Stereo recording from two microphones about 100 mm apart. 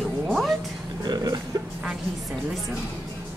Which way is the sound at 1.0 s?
40° right (ahead or behind).